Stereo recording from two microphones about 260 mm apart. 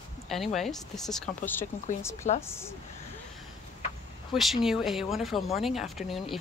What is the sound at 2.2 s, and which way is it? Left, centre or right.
Speech, left.